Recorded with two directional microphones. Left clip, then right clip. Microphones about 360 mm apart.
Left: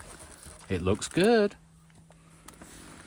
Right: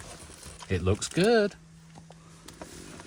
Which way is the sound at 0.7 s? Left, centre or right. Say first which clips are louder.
Even; left.